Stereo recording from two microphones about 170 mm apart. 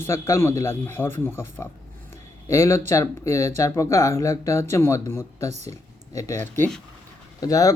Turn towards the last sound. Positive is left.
turn(degrees=20)  # may be behind; listen again after turning